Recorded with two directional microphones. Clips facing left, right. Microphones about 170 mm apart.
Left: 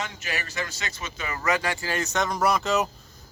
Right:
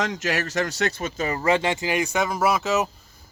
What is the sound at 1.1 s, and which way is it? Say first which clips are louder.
Speech: right 3 dB; 35° right (ahead or behind).